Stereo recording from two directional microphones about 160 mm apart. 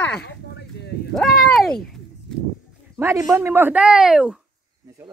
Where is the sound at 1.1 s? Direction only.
Centre (ahead or behind).